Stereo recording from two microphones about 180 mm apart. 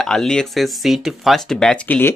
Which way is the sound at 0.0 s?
5° left (ahead or behind).